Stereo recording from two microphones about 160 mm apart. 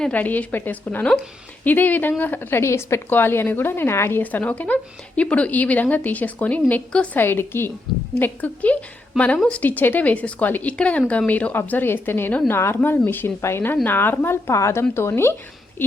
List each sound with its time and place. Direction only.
0.0 s a woman's voice: 10° left (ahead or behind)